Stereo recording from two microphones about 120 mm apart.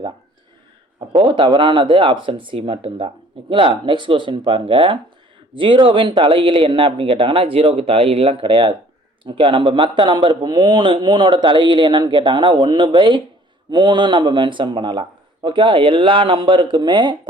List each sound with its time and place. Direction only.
1.1 s speech: 45° right (ahead or behind)